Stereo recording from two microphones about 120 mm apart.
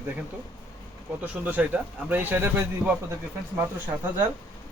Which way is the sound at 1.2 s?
15° right (ahead or behind).